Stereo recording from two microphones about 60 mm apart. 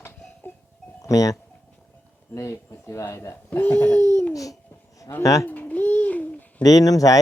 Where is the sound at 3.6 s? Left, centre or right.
Left.